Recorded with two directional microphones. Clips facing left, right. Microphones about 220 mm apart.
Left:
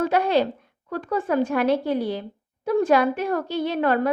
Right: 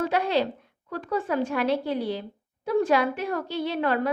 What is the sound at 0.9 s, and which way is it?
A woman's voice, 50° left (ahead or behind).